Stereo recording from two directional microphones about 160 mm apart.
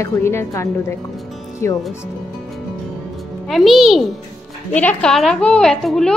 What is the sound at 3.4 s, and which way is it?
Speech, centre (ahead or behind).